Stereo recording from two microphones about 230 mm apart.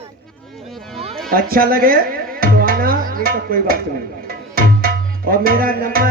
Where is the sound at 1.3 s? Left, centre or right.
Right.